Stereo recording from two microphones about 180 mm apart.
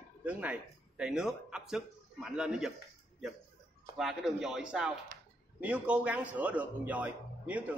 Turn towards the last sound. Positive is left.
turn(degrees=-10)  # may be behind; listen again after turning